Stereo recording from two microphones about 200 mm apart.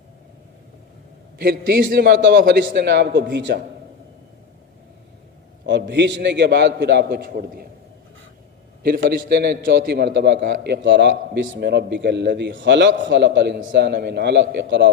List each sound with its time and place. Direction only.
1.4 s a man's voice: 45° right (ahead or behind)
5.6 s a man's voice: 60° right (ahead or behind)
8.8 s a man's voice: 45° right (ahead or behind)